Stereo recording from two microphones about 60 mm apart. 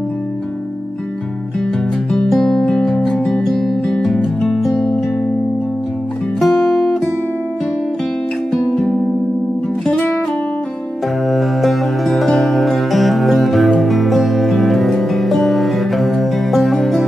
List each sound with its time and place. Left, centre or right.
2.5 s music: centre
6.4 s music: centre
9.8 s music: left
11.2 s music: centre